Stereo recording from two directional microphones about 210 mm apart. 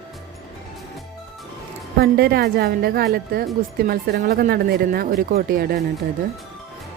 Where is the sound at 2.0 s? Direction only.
50° right (ahead or behind).